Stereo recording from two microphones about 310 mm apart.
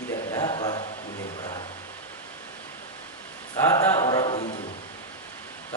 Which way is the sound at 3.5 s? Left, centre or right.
Centre.